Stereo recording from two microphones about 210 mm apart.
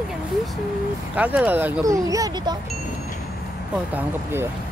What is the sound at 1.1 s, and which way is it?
Speech, 5° right (ahead or behind).